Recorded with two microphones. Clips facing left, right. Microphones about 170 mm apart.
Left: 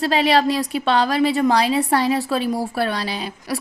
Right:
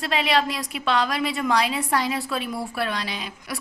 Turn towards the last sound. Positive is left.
turn(degrees=35)  # may be behind; listen again after turning